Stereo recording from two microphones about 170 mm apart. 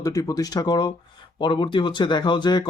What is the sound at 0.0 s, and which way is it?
Speech, 20° left (ahead or behind).